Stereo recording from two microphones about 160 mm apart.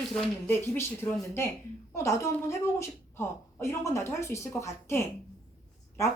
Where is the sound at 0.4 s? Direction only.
15° left (ahead or behind).